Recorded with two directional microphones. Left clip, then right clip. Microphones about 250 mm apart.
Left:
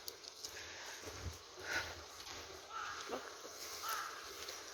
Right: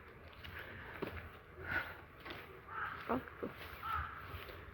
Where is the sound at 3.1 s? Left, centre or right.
Centre.